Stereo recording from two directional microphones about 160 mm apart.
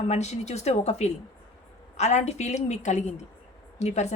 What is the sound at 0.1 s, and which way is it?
A woman's voice, 45° left (ahead or behind).